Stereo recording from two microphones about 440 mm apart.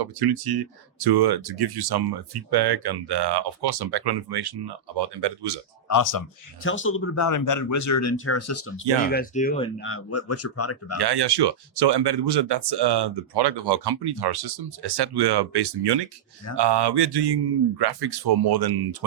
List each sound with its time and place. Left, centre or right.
0.0 s speech: right
5.9 s speech: left
6.6 s speech: left
7.3 s speech: left
9.0 s speech: centre
10.9 s speech: right